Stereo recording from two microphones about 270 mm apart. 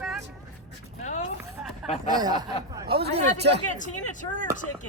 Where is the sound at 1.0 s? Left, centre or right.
Left.